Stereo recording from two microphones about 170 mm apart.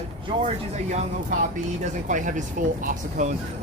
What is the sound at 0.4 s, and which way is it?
Speech, 45° right (ahead or behind).